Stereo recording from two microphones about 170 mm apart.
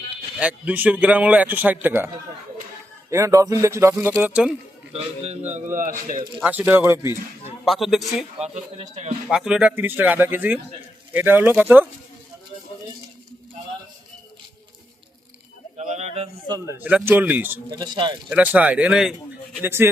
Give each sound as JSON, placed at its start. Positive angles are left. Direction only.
{"t": 0.3, "sound": "a man's voice", "side_deg": -10}
{"t": 3.1, "sound": "a man's voice", "side_deg": -15}
{"t": 4.9, "sound": "a man's voice", "side_deg": -40}
{"t": 6.4, "sound": "a man's voice", "side_deg": -10}
{"t": 7.6, "sound": "a man's voice", "side_deg": 0}
{"t": 8.8, "sound": "a man's voice", "side_deg": -40}
{"t": 9.3, "sound": "a man's voice", "side_deg": -5}
{"t": 15.8, "sound": "a sound", "side_deg": -40}
{"t": 16.5, "sound": "a man's voice", "side_deg": -15}
{"t": 17.7, "sound": "speech", "side_deg": -25}
{"t": 18.3, "sound": "a man's voice", "side_deg": -10}